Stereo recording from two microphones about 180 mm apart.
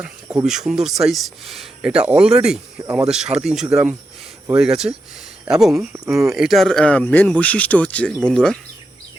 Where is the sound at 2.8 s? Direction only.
20° right (ahead or behind).